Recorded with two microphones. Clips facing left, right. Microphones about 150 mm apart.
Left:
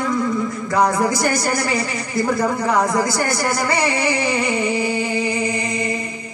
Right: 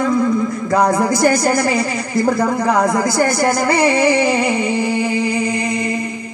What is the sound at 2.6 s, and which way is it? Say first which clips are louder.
Speech: right 3 dB; 60° right (ahead or behind).